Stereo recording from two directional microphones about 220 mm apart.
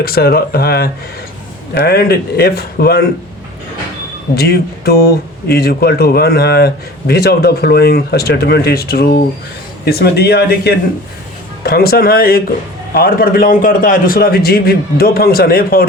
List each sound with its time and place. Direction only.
0.0 s a man's voice: 45° left (ahead or behind)
4.4 s a man's voice: 45° left (ahead or behind)